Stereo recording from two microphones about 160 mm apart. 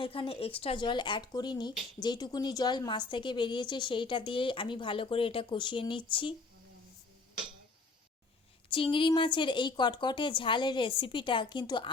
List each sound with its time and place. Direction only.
0.0 s a woman's voice: 35° left (ahead or behind)
8.7 s a woman's voice: 30° left (ahead or behind)